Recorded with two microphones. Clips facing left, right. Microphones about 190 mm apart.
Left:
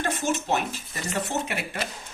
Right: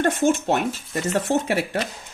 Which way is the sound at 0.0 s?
60° right (ahead or behind).